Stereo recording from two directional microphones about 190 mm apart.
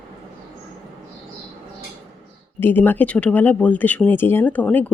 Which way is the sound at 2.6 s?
10° left (ahead or behind).